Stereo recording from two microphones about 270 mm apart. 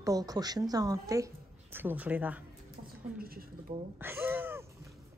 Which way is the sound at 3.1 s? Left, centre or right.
Right.